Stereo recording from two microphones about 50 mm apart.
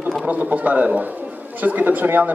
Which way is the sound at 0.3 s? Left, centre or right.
Right.